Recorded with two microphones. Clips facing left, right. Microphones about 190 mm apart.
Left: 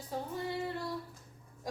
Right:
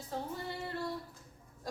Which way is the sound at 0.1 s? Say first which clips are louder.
Left 1 dB; 10° left (ahead or behind).